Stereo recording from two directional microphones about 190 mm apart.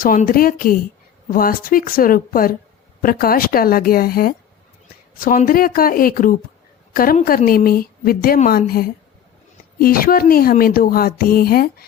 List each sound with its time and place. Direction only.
0.0 s a woman's voice: 45° left (ahead or behind)